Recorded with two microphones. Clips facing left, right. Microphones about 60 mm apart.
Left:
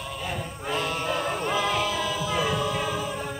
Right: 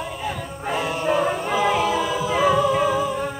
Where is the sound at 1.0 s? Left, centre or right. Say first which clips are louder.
Right 6 dB; centre.